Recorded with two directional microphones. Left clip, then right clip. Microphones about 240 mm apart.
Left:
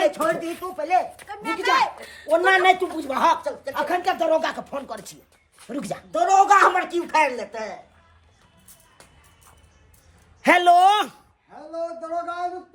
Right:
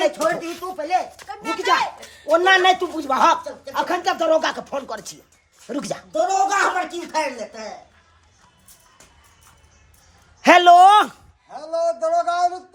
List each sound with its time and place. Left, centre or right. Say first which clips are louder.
0.2 s speech: right 2 dB; centre
2.3 s speech: right 2 dB; right
6.1 s a woman's voice: left 3 dB; centre
10.4 s speech: right 5 dB; right
11.5 s speech: right 8 dB; right